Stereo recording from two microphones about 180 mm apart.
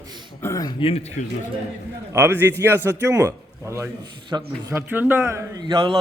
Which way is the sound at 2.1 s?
15° right (ahead or behind).